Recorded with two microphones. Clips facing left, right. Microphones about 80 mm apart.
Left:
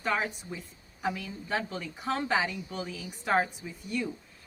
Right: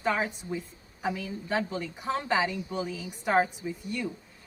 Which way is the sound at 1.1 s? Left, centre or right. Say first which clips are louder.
Right 3 dB; centre.